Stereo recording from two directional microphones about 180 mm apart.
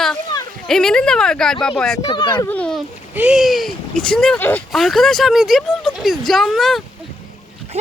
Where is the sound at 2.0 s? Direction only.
25° left (ahead or behind).